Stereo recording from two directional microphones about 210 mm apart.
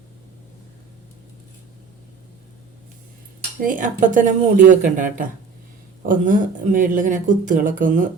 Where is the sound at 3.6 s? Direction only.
40° right (ahead or behind).